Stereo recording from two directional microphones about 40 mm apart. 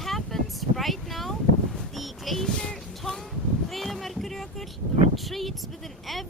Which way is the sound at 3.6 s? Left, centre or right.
Centre.